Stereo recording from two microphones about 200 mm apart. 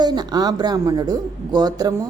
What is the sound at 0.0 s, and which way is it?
A woman's voice, 20° right (ahead or behind).